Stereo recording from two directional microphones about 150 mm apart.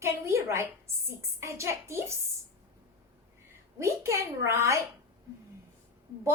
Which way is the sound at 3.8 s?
20° right (ahead or behind).